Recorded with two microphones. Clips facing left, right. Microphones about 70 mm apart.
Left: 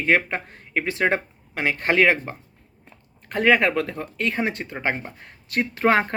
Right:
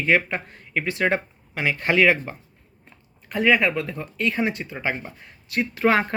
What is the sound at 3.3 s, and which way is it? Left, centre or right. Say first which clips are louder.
Speech: left 1 dB; left.